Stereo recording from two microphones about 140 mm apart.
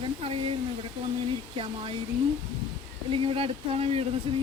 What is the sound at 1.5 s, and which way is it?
Speech, 40° right (ahead or behind).